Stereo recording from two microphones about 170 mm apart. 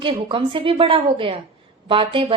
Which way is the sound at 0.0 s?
30° right (ahead or behind).